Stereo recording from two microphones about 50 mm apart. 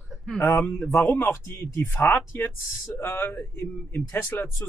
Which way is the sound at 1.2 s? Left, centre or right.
Left.